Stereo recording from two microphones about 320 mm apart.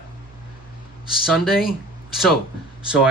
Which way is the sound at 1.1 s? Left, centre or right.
Centre.